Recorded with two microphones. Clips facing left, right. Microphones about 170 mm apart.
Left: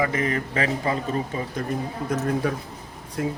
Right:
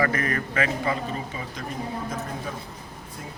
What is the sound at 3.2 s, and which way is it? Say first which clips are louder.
Speech: left 15 dB; 80° left.